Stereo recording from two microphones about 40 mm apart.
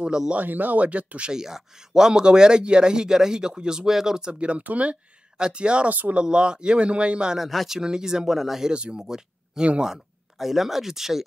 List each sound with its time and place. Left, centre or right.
0.0 s speech: centre
0.4 s speech: right
1.3 s speech: centre
4.3 s a man's voice: right
5.4 s a man's voice: right
5.9 s speech: right
6.1 s a man's voice: right
7.3 s speech: centre
7.8 s speech: centre
8.7 s a man's voice: right
10.4 s speech: centre